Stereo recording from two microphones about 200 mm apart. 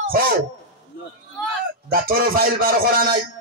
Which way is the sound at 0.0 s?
45° right (ahead or behind).